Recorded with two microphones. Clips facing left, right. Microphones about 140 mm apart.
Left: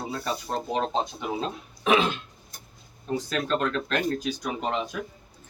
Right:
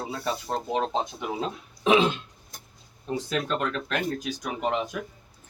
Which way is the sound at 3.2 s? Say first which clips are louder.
Left 1 dB; 15° right (ahead or behind).